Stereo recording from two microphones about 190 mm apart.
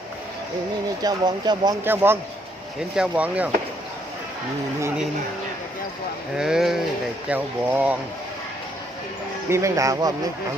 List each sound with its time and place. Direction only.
1.0 s speech: 20° right (ahead or behind)
6.3 s speech: 5° right (ahead or behind)
9.5 s speech: 15° right (ahead or behind)